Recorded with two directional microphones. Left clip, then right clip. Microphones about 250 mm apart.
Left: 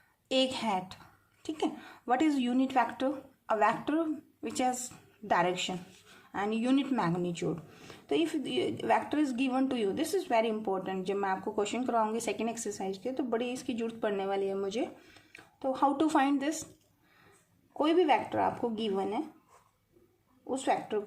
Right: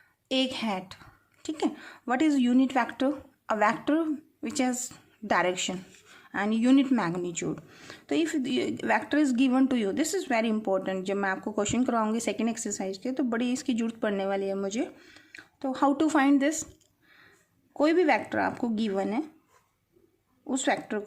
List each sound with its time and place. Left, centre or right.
0.5 s a woman's voice: right
17.7 s a woman's voice: right
20.5 s a woman's voice: right